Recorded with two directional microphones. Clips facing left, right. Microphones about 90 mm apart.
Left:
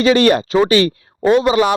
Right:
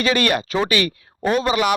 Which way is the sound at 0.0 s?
30° left (ahead or behind).